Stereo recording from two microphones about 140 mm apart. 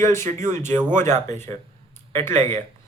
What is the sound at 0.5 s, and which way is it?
Speech, 15° left (ahead or behind).